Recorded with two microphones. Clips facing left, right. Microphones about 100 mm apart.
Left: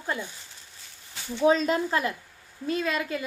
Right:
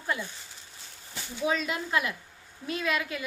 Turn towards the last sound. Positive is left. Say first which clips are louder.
# left 2 dB
turn(degrees=35)  # may be behind; listen again after turning